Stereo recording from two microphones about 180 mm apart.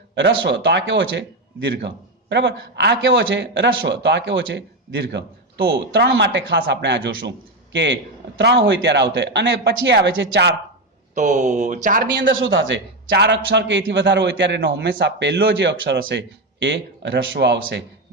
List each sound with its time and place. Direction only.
0.2 s a man's voice: 80° right
2.3 s a man's voice: 80° right
11.1 s speech: 45° right (ahead or behind)
12.1 s a man's voice: 90° right